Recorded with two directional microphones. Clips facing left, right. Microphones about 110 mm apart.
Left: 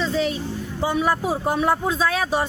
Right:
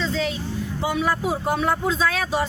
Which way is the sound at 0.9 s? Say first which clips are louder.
Left 2 dB; 30° left (ahead or behind).